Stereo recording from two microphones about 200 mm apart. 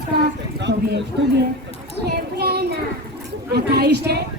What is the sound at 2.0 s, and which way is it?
Child singing, 55° right (ahead or behind).